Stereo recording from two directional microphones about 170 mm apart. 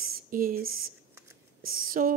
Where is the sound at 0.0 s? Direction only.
55° right (ahead or behind).